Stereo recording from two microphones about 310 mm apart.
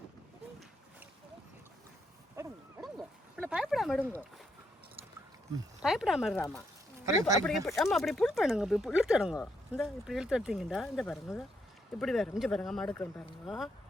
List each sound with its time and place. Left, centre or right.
2.3 s a sound: centre
5.8 s speech: centre
7.4 s speech: centre